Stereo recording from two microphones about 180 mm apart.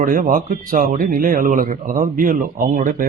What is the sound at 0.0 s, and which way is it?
Speech, 50° right (ahead or behind).